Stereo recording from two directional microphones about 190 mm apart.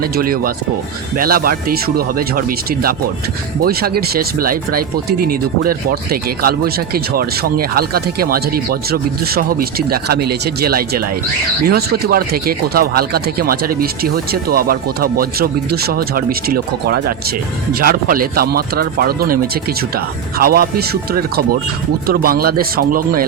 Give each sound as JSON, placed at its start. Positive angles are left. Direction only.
{"t": 0.0, "sound": "speech", "side_deg": -50}